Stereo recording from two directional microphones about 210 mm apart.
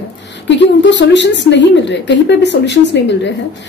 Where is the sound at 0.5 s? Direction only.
55° left (ahead or behind).